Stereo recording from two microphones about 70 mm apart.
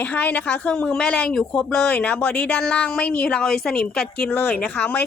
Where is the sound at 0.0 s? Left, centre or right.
Left.